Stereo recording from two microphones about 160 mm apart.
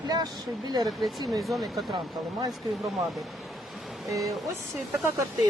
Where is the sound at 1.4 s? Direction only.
Centre (ahead or behind).